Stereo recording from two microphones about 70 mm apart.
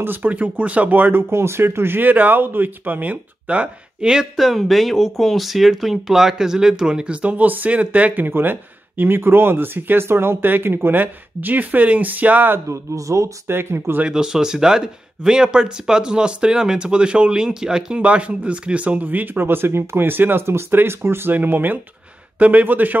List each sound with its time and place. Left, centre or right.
0.0 s speech: right
12.6 s a man's voice: right
13.5 s speech: right
14.0 s speech: centre